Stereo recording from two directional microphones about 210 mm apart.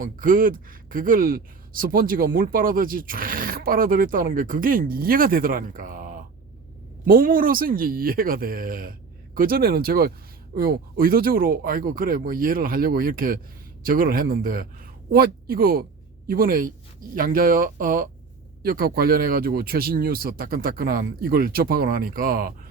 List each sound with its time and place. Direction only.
0.0 s speech: 40° right (ahead or behind)